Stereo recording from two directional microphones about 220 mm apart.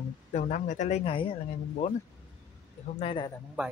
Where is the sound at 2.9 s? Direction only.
25° left (ahead or behind).